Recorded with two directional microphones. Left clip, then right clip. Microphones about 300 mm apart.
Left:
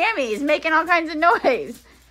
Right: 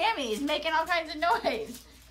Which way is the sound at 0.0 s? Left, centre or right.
Centre.